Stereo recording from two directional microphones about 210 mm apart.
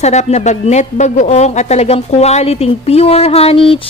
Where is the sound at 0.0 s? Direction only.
35° left (ahead or behind).